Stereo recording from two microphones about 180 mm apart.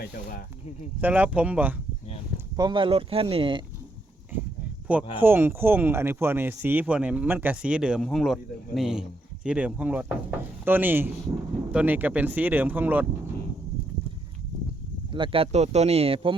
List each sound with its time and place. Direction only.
0.0 s speech: 55° left (ahead or behind)
1.0 s speech: 10° right (ahead or behind)
2.6 s speech: 25° right (ahead or behind)
4.9 s speech: 10° right (ahead or behind)
15.1 s speech: 30° right (ahead or behind)